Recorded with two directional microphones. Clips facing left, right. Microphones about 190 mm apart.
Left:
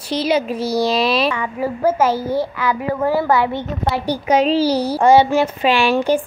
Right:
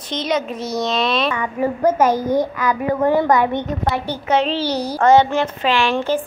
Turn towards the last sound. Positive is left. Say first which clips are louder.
# left 3 dB
turn(degrees=15)  # may be behind; listen again after turning